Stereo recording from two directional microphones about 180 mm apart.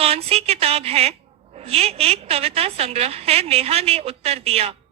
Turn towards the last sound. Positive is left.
turn(degrees=-35)  # may be behind; listen again after turning